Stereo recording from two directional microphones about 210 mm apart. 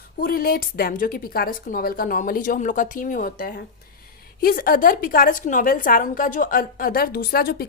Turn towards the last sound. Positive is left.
turn(degrees=45)  # may be behind; listen again after turning